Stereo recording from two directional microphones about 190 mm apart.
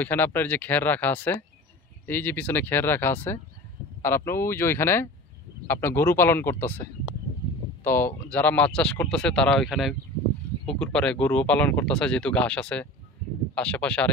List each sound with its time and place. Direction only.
0.0 s speech: 10° left (ahead or behind)